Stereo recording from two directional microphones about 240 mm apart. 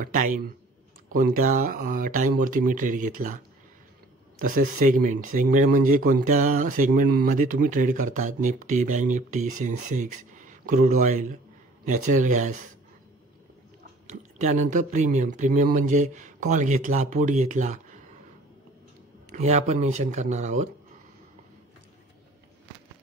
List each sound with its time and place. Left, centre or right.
0.0 s speech: right
4.4 s speech: right
14.0 s speech: right
19.3 s speech: right